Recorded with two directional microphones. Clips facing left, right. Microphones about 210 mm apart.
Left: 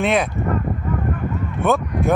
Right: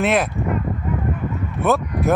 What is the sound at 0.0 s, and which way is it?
Speech, centre (ahead or behind).